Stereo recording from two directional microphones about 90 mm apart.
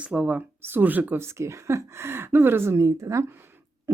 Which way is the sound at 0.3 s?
20° right (ahead or behind).